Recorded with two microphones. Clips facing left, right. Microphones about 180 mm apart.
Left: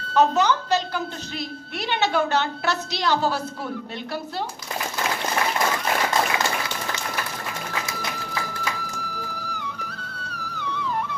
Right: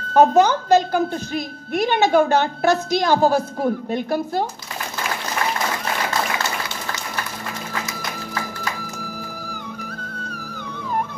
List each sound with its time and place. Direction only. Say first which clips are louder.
0.1 s a child's voice: right 5 dB; 50° right (ahead or behind)
10.2 s music: right 1 dB; 50° right (ahead or behind)